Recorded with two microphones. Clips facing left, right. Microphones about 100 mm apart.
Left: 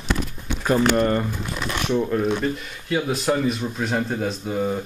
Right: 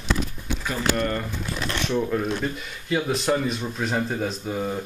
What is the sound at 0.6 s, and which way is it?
Speech, 45° left (ahead or behind).